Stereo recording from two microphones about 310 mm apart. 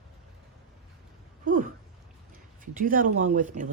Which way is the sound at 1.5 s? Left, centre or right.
Right.